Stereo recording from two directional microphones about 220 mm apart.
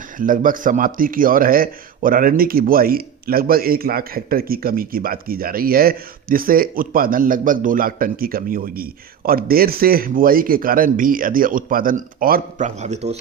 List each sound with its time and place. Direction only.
0.2 s speech: 40° right (ahead or behind)